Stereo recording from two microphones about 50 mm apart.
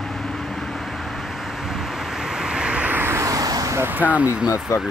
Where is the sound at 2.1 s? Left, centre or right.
Centre.